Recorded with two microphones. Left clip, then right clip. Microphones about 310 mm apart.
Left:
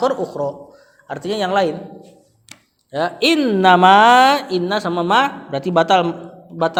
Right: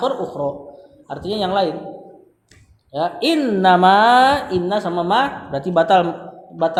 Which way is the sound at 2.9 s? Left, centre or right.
Left.